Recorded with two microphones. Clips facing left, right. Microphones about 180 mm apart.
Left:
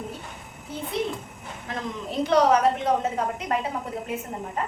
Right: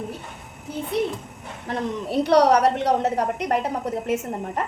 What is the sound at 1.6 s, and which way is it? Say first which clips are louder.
A woman's voice: right 6 dB; 65° right (ahead or behind).